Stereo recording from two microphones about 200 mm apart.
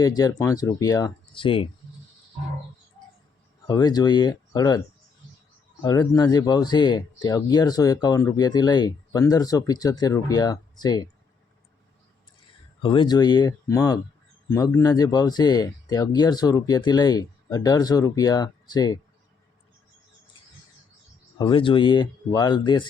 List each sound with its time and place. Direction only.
0.0 s speech: 20° left (ahead or behind)
3.7 s speech: 20° left (ahead or behind)
5.8 s speech: 20° left (ahead or behind)
12.8 s speech: 25° left (ahead or behind)
21.3 s speech: 25° left (ahead or behind)